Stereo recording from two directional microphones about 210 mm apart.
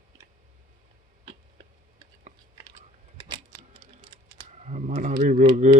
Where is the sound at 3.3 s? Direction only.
20° right (ahead or behind).